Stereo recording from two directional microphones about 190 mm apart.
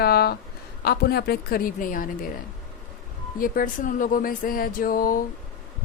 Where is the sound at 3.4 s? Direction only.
45° left (ahead or behind).